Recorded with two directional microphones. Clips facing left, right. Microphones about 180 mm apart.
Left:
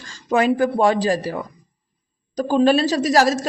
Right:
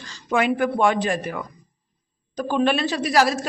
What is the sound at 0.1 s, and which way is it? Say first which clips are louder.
A man's voice: left 3 dB; 40° left (ahead or behind).